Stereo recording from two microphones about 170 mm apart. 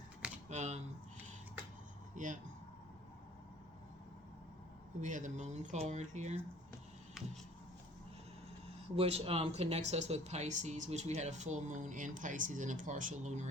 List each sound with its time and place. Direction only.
0.4 s a sound: 40° right (ahead or behind)
2.1 s speech: 50° right (ahead or behind)
4.9 s speech: 45° right (ahead or behind)
9.0 s speech: 35° right (ahead or behind)